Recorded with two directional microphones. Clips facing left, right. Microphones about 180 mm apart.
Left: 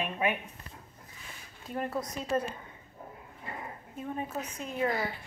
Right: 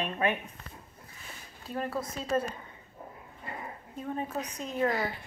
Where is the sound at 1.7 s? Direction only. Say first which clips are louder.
Even; 15° left (ahead or behind).